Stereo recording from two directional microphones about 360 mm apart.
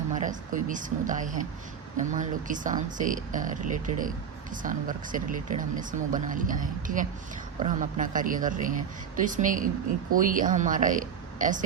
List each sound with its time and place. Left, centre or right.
0.1 s speech: right